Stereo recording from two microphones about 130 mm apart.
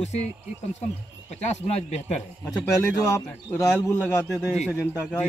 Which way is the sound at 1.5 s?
55° left (ahead or behind).